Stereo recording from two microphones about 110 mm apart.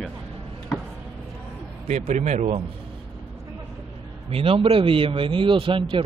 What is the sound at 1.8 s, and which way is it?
Speech, 90° right.